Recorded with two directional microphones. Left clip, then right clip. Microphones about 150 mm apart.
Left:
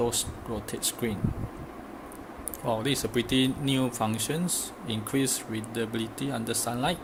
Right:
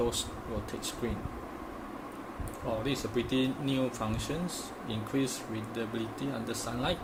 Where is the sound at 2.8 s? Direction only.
50° left (ahead or behind).